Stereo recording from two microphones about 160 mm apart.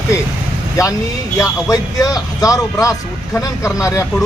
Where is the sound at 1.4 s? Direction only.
20° left (ahead or behind).